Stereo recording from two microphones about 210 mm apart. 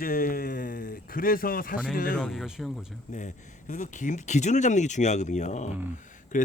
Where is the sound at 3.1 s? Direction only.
35° left (ahead or behind).